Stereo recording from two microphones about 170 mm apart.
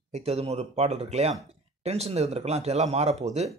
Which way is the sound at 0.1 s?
40° right (ahead or behind).